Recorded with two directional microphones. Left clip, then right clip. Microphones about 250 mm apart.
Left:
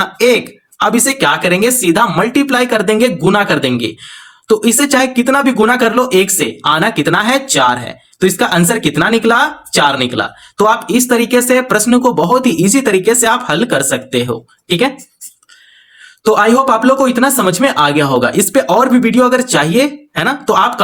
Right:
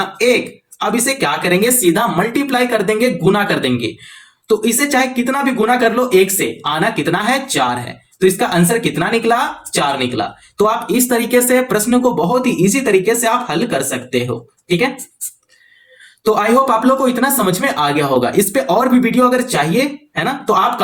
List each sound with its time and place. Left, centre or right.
0.0 s speech: left
16.2 s speech: left